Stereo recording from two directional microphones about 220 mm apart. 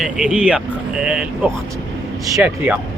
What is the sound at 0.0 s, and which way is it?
Speech, 5° right (ahead or behind).